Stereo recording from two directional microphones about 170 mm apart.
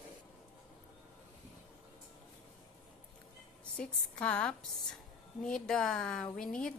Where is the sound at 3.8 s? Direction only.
5° left (ahead or behind).